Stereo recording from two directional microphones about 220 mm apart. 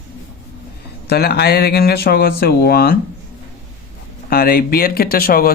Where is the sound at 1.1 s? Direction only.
45° left (ahead or behind).